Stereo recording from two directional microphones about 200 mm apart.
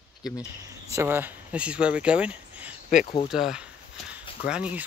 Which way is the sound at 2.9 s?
40° left (ahead or behind).